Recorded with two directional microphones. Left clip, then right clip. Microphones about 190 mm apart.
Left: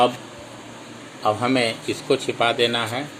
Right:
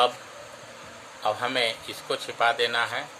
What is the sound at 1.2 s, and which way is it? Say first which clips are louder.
Speech: left 5 dB; 10° left (ahead or behind).